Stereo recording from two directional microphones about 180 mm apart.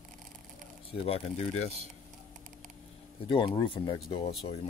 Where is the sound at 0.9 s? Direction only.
35° left (ahead or behind).